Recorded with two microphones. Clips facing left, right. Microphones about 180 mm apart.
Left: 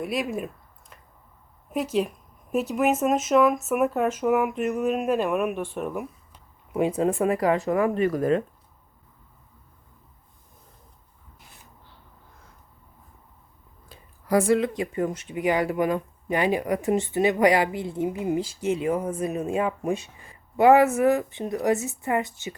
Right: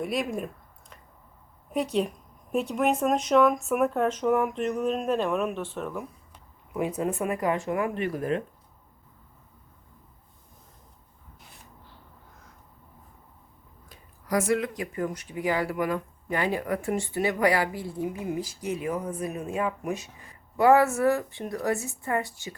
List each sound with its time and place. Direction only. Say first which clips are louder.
0.0 s a woman's voice: left 1 dB; centre (ahead or behind)
7.0 s speech: left 5 dB; 30° left (ahead or behind)
13.9 s speech: left 5 dB; 30° left (ahead or behind)